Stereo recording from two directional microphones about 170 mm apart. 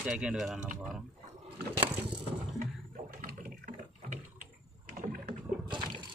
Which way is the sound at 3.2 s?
55° right (ahead or behind).